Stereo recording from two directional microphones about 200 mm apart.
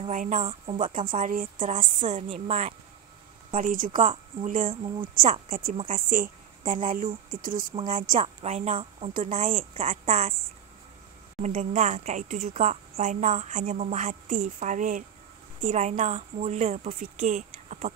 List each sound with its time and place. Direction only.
0.0 s a woman's voice: 40° right (ahead or behind)
3.5 s speech: 40° right (ahead or behind)
4.6 s speech: 25° right (ahead or behind)
5.1 s a woman's voice: 45° right (ahead or behind)
11.4 s a woman's voice: 35° right (ahead or behind)